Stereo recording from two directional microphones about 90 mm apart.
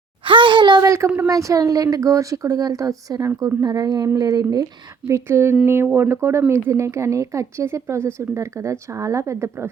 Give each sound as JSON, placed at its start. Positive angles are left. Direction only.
{"t": 0.3, "sound": "a child's voice", "side_deg": -65}
{"t": 0.8, "sound": "a woman's voice", "side_deg": -35}
{"t": 5.0, "sound": "a woman's voice", "side_deg": -35}